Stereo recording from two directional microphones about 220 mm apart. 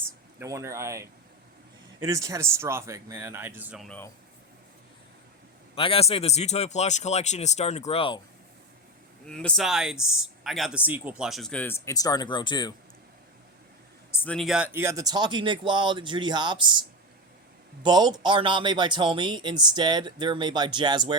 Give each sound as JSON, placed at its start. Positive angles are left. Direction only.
{"t": 0.3, "sound": "speech", "side_deg": -15}
{"t": 3.8, "sound": "speech", "side_deg": 5}
{"t": 5.7, "sound": "a man's voice", "side_deg": 25}
{"t": 9.2, "sound": "speech", "side_deg": 5}
{"t": 14.2, "sound": "speech", "side_deg": 5}
{"t": 17.8, "sound": "speech", "side_deg": -20}